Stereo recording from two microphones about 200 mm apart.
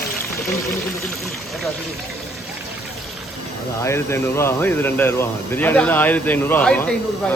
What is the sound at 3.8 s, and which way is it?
Speech, 15° left (ahead or behind).